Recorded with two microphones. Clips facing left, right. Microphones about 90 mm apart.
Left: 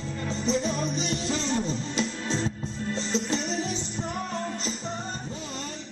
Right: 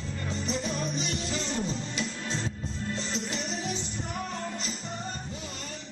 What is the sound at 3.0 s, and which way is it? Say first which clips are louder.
Music: left 5 dB; centre (ahead or behind).